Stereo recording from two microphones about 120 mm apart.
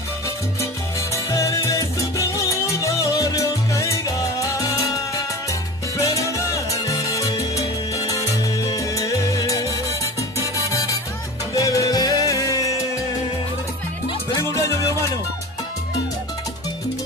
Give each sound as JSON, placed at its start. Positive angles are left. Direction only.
{"t": 1.1, "sound": "music", "side_deg": 25}
{"t": 14.3, "sound": "music", "side_deg": 25}